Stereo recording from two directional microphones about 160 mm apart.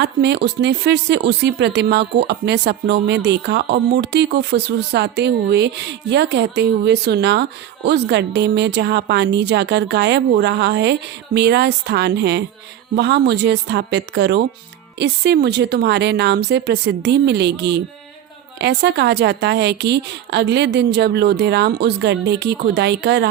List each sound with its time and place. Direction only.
0.0 s speech: 90° right